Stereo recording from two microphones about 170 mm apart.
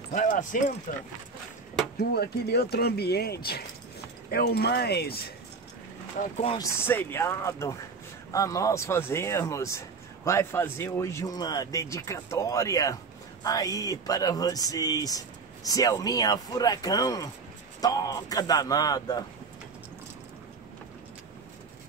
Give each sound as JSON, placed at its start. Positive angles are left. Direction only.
{"t": 0.1, "sound": "speech", "side_deg": 50}
{"t": 2.0, "sound": "speech", "side_deg": 70}
{"t": 6.1, "sound": "speech", "side_deg": 35}
{"t": 6.6, "sound": "speech", "side_deg": 10}